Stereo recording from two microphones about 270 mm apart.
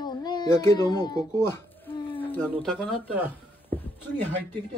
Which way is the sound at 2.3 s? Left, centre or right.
Centre.